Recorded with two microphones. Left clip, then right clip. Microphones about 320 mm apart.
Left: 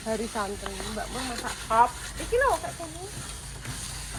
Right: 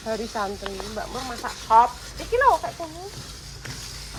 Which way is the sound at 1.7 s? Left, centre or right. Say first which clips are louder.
Right 5 dB; right.